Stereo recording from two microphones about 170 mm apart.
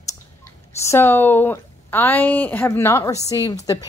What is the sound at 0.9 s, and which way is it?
A woman's voice, 10° left (ahead or behind).